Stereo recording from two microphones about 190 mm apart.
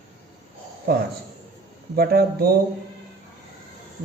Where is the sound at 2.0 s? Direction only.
55° right (ahead or behind).